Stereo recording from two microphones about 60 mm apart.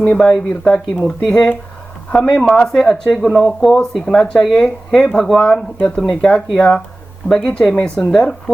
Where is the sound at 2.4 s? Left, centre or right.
Centre.